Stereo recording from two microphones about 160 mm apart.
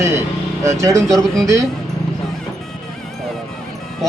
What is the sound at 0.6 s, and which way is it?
Speech, 20° right (ahead or behind).